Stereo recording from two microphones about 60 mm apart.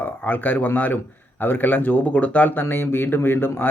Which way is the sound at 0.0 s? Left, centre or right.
Left.